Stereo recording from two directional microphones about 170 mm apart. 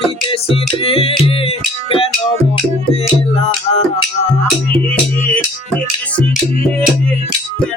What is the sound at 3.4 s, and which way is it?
Music, 40° left (ahead or behind).